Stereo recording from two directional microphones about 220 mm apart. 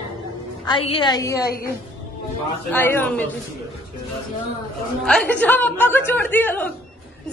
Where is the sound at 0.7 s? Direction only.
25° left (ahead or behind).